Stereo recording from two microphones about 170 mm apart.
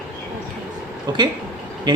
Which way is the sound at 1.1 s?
25° right (ahead or behind).